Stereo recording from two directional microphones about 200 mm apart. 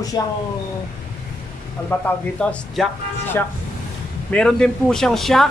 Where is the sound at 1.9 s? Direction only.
5° left (ahead or behind).